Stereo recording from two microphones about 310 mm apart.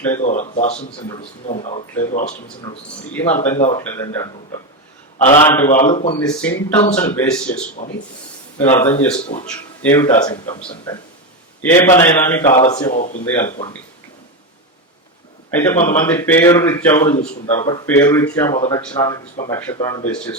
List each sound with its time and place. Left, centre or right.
0.2 s speech: left
3.1 s a man's voice: centre
3.6 s a man's voice: centre
5.4 s a man's voice: centre
5.7 s speech: left
6.1 s speech: centre
8.5 s a man's voice: centre
12.5 s speech: left
13.2 s a man's voice: centre
15.4 s a man's voice: centre